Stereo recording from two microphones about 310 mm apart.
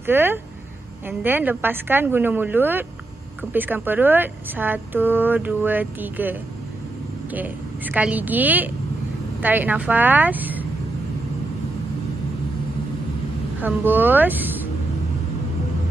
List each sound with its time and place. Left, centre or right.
0.0 s a woman's voice: centre
7.3 s speech: centre
13.6 s speech: centre